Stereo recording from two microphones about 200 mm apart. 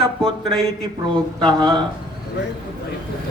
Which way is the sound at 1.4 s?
20° right (ahead or behind).